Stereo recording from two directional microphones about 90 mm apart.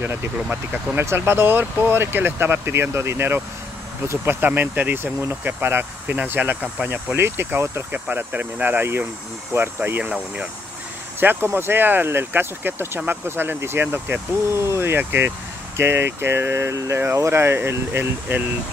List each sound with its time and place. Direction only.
0.0 s speech: 25° right (ahead or behind)
11.1 s speech: 25° right (ahead or behind)